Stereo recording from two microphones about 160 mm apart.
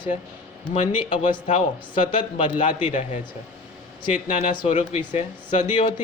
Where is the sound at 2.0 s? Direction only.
35° left (ahead or behind); by 5.6 s 50° left (ahead or behind).